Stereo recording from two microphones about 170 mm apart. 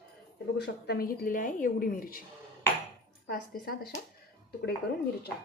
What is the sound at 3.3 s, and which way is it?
Speech, 65° left (ahead or behind).